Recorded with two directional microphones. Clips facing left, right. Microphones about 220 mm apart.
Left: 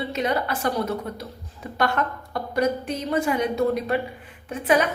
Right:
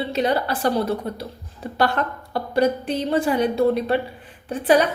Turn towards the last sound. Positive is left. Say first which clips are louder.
# right 4 dB
turn(degrees=-35)  # may be behind; listen again after turning